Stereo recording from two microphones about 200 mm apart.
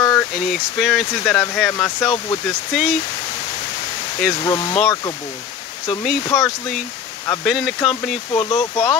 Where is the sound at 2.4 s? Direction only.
Centre (ahead or behind).